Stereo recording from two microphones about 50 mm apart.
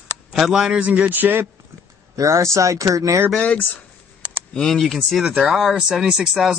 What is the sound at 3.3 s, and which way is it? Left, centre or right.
Speech, left.